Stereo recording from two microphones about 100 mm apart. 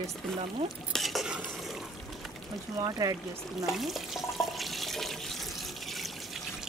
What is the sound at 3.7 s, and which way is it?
Water tap, centre (ahead or behind).